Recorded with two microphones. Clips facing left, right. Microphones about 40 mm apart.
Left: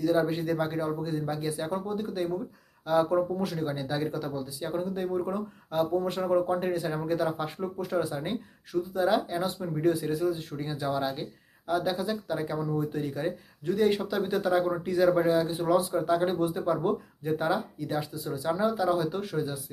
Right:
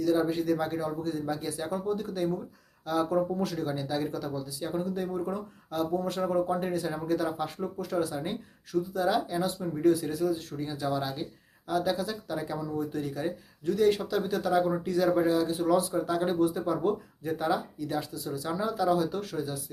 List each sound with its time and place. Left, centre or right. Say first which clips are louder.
0.0 s speech: even; centre